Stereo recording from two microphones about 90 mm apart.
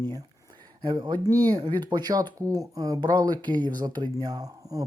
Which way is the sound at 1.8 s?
50° right (ahead or behind).